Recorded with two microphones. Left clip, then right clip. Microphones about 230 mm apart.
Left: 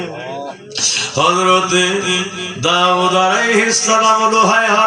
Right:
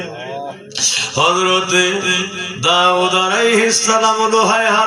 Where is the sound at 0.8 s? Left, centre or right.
Right.